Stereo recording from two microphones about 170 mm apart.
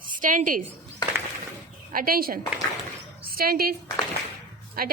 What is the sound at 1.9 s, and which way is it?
A woman's voice, 60° right (ahead or behind).